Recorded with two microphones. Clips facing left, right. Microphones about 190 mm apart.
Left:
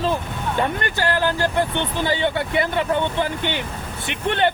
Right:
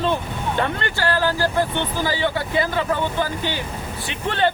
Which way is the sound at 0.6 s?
15° left (ahead or behind).